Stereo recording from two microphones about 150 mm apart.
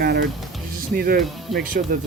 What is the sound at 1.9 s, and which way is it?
Speech, 70° right (ahead or behind).